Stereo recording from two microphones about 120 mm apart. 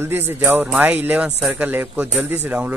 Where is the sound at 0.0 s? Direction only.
20° right (ahead or behind).